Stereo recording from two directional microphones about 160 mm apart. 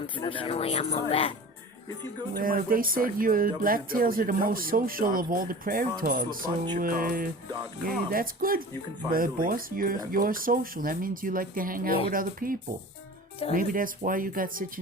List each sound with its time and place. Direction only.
0.0 s speech: 35° left (ahead or behind)
2.3 s speech: 60° right (ahead or behind)